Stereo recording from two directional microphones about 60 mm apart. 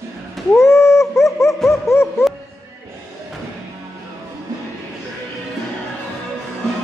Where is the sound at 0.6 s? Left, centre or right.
Left.